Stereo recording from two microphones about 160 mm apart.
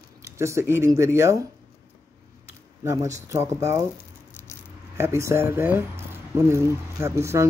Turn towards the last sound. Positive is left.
turn(degrees=-15)  # may be behind; listen again after turning